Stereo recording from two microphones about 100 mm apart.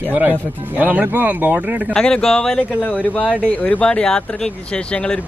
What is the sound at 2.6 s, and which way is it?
Speech, 15° left (ahead or behind).